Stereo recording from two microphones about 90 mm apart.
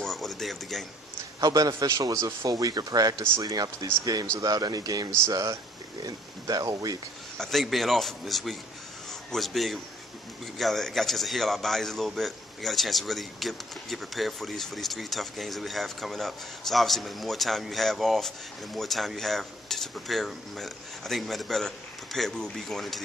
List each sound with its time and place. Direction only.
0.0 s a sound: centre (ahead or behind)
1.4 s a man's voice: 40° right (ahead or behind)
7.3 s a man's voice: 5° left (ahead or behind)